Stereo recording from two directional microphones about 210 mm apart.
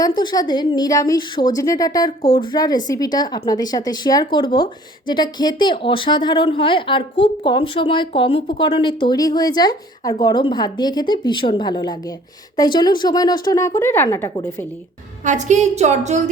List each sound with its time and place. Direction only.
0.2 s speech: 20° left (ahead or behind)
15.2 s a woman's voice: 35° right (ahead or behind)